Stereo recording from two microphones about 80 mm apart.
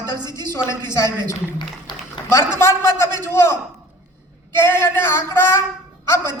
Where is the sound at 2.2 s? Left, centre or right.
Left.